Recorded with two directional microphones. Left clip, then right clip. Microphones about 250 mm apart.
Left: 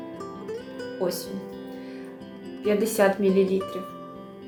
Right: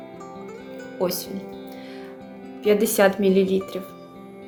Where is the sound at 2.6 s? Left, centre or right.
Right.